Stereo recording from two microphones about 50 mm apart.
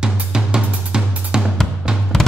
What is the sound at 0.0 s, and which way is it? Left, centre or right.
Drum kit, centre.